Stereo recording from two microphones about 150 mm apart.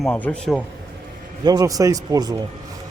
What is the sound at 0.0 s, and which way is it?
Speech, 10° left (ahead or behind).